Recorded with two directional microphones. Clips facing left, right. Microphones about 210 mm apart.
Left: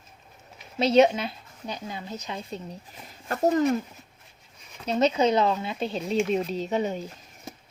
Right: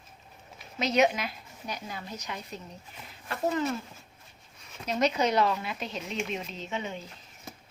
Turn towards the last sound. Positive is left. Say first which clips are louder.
# left 9 dB
turn(degrees=40)  # may be behind; listen again after turning